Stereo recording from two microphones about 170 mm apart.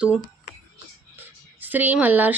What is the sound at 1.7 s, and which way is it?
Speech, 10° right (ahead or behind).